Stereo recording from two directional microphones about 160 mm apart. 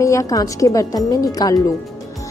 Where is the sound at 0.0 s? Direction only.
20° left (ahead or behind).